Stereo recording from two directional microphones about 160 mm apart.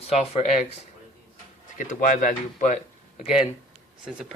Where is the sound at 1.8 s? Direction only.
55° left (ahead or behind).